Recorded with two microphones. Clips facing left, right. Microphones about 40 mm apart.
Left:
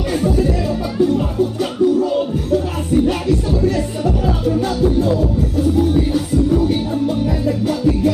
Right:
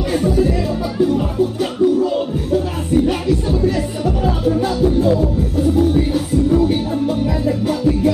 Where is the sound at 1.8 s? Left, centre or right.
Centre.